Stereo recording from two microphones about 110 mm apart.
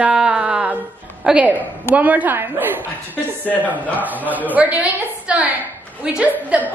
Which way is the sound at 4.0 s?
15° right (ahead or behind).